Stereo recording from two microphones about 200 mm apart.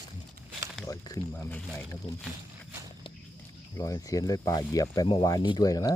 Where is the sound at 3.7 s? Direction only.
15° left (ahead or behind).